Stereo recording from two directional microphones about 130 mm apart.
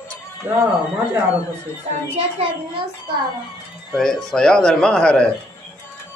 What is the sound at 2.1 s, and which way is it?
Speech, 50° right (ahead or behind).